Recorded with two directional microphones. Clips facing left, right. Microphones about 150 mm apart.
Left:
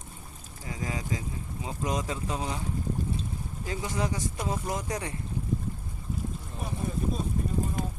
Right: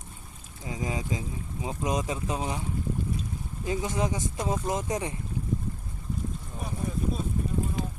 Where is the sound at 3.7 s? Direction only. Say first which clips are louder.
Right 3 dB; 20° right (ahead or behind).